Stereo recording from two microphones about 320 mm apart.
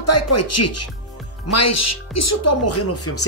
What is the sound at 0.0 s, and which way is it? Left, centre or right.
Speech, left.